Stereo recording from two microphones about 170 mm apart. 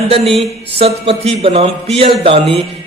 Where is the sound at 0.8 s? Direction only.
35° right (ahead or behind).